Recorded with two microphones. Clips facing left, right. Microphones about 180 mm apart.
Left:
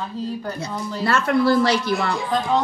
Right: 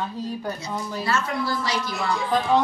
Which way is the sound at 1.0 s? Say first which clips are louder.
Left 8 dB; 65° left (ahead or behind).